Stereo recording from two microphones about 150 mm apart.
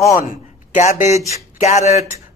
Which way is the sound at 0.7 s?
55° left (ahead or behind).